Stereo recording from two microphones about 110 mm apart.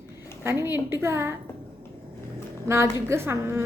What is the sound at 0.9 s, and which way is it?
Speech, 25° right (ahead or behind).